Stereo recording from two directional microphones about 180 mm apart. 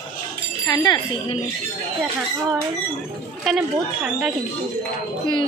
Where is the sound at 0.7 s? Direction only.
25° left (ahead or behind).